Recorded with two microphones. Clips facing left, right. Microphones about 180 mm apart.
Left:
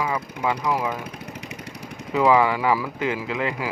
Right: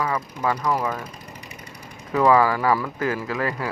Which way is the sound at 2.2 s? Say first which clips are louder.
Right 1 dB; 15° left (ahead or behind).